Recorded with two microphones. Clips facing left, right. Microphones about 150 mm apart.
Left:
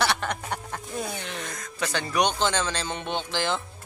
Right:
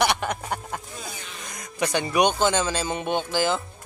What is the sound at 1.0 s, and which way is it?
Speech, 70° left (ahead or behind).